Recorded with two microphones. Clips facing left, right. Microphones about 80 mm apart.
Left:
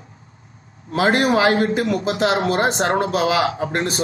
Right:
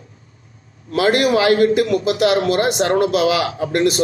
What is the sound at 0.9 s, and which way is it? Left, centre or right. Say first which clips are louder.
A man's voice: right 1 dB; left.